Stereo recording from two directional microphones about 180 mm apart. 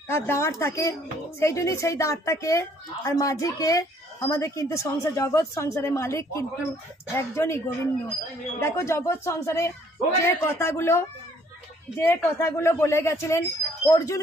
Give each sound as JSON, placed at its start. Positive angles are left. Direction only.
{"t": 0.1, "sound": "a woman's voice", "side_deg": 15}